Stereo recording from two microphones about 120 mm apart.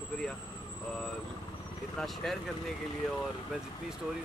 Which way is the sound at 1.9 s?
Centre (ahead or behind).